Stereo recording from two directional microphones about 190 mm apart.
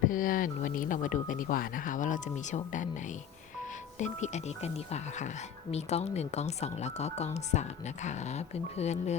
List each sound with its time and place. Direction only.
0.1 s speech: 45° left (ahead or behind)
3.9 s speech: 40° left (ahead or behind)